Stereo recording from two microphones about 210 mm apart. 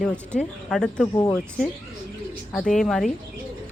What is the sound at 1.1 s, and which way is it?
Speech, 15° left (ahead or behind).